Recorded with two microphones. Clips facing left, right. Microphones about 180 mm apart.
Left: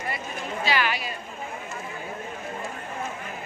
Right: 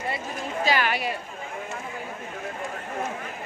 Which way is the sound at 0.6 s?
45° right (ahead or behind).